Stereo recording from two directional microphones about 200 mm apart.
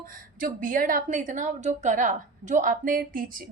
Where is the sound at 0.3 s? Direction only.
45° right (ahead or behind).